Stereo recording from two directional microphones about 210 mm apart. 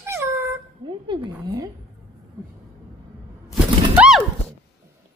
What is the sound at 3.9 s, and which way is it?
Horse, 5° right (ahead or behind).